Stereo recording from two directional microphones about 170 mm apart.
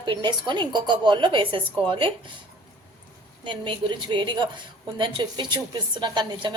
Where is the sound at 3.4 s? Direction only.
25° right (ahead or behind).